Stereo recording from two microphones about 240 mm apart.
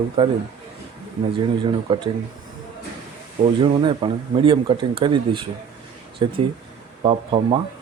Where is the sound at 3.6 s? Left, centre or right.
Right.